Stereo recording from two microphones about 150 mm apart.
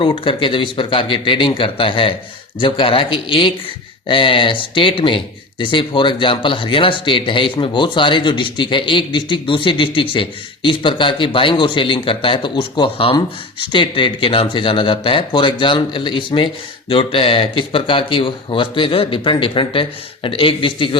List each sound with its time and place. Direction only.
0.0 s speech: 35° left (ahead or behind)